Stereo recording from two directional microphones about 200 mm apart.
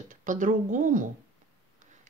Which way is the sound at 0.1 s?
40° right (ahead or behind).